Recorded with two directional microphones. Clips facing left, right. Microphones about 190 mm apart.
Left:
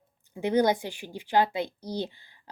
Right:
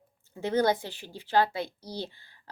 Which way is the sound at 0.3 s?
15° left (ahead or behind).